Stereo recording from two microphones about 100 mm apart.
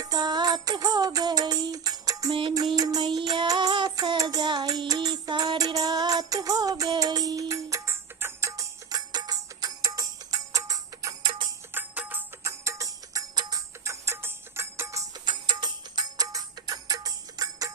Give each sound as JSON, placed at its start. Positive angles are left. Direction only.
{"t": 0.0, "sound": "music", "side_deg": -40}
{"t": 3.9, "sound": "child singing", "side_deg": -50}
{"t": 4.2, "sound": "music", "side_deg": -40}
{"t": 5.5, "sound": "music", "side_deg": -35}
{"t": 11.7, "sound": "music", "side_deg": -20}
{"t": 12.4, "sound": "music", "side_deg": -30}
{"t": 15.2, "sound": "music", "side_deg": -45}